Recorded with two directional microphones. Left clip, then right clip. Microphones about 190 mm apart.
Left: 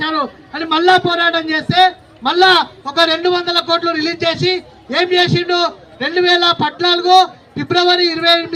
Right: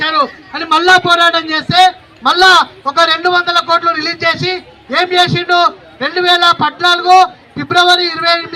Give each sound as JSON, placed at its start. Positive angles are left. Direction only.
{"t": 0.0, "sound": "a man's voice", "side_deg": 30}